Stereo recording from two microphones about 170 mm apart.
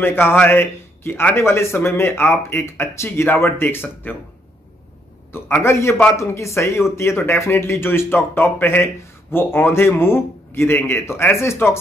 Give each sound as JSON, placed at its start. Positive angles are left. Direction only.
{"t": 0.0, "sound": "speech", "side_deg": 10}
{"t": 5.3, "sound": "speech", "side_deg": 15}